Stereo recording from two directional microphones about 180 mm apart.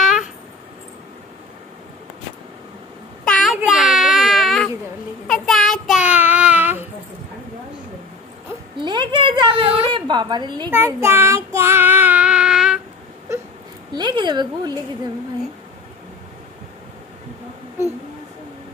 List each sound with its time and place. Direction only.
0.0 s a sound: centre (ahead or behind)
3.3 s child singing: 5° left (ahead or behind)
8.7 s a woman's voice: 25° right (ahead or behind)
10.7 s child singing: 15° right (ahead or behind)
13.9 s a woman's voice: 25° right (ahead or behind)